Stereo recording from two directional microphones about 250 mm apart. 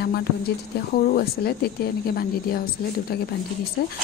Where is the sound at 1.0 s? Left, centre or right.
Left.